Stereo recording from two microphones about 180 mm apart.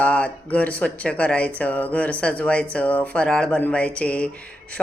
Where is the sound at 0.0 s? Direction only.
10° left (ahead or behind).